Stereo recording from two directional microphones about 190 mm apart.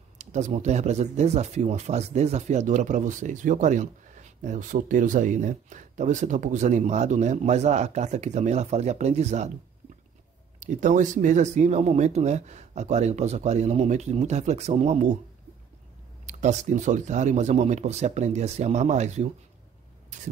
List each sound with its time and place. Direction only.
0.2 s speech: 40° right (ahead or behind)
10.6 s speech: 40° right (ahead or behind)
16.3 s speech: 40° right (ahead or behind)